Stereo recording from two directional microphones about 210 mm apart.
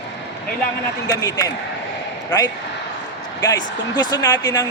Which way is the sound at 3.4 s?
20° left (ahead or behind).